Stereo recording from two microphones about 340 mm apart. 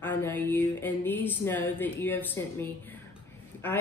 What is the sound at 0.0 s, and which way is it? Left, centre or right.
Music, centre.